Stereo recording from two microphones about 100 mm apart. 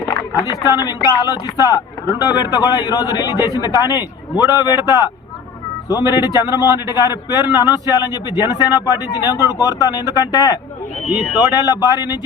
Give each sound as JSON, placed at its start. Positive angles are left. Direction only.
{"t": 0.5, "sound": "speech", "side_deg": -30}
{"t": 0.8, "sound": "a man's voice", "side_deg": 35}
{"t": 5.9, "sound": "a man's voice", "side_deg": 40}